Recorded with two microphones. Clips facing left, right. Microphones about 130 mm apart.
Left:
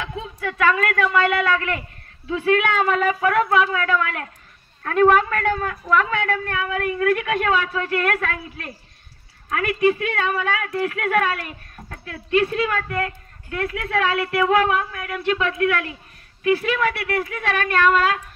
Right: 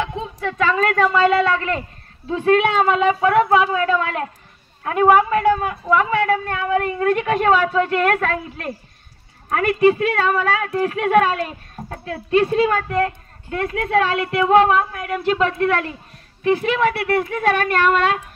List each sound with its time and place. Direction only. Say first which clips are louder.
0.0 s a woman's voice: right 4 dB; 30° right (ahead or behind)
4.8 s a man's voice: right 2 dB; 15° right (ahead or behind)
6.3 s speech: right 5 dB; 30° right (ahead or behind)